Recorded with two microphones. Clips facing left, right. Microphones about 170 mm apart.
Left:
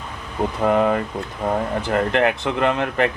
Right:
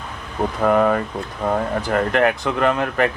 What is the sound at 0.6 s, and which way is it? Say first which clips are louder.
Speech: right 1 dB; 20° left (ahead or behind).